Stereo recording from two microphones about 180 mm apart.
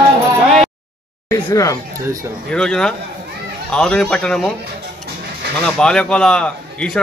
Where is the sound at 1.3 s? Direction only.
20° left (ahead or behind).